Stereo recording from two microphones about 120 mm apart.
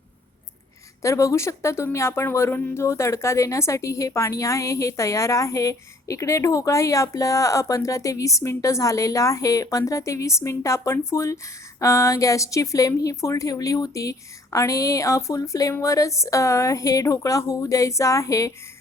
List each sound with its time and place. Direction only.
1.0 s speech: 25° left (ahead or behind)